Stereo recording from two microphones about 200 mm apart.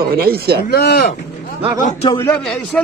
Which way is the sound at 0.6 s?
55° left (ahead or behind).